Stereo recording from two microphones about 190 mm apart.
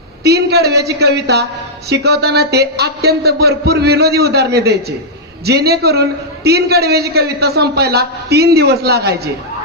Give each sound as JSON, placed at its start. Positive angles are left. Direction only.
{"t": 0.2, "sound": "a woman's voice", "side_deg": -60}